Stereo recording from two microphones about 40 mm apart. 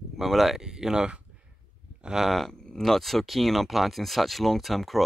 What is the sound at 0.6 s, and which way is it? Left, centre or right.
Speech, centre.